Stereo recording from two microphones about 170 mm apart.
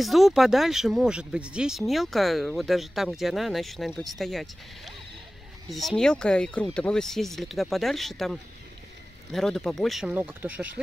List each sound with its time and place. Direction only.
0.0 s speech: centre (ahead or behind)